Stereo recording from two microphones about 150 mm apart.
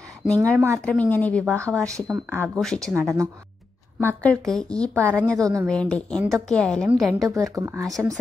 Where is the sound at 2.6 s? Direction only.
5° left (ahead or behind).